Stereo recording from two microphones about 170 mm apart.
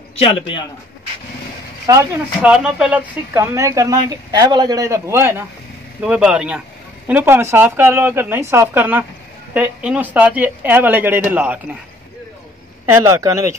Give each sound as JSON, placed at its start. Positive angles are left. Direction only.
{"t": 0.1, "sound": "a man's voice", "side_deg": 30}
{"t": 1.9, "sound": "speech", "side_deg": -20}
{"t": 2.4, "sound": "speech", "side_deg": -5}
{"t": 3.3, "sound": "speech", "side_deg": -20}
{"t": 12.8, "sound": "speech", "side_deg": -15}